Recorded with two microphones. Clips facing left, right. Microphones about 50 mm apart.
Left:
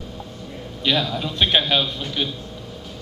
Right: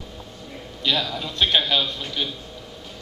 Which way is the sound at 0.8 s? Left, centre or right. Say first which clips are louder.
Left 3 dB; centre.